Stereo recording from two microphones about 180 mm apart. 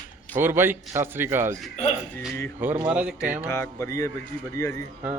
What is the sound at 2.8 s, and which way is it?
Speech, 5° right (ahead or behind).